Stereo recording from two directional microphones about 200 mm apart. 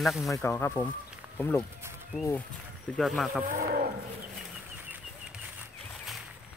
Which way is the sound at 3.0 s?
Centre (ahead or behind).